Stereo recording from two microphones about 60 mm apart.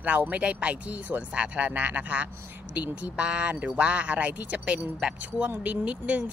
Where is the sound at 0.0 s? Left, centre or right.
Right.